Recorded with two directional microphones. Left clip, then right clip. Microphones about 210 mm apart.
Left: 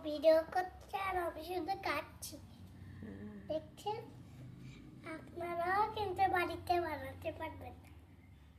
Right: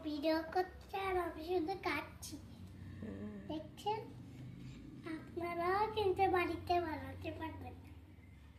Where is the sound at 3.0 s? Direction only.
5° right (ahead or behind).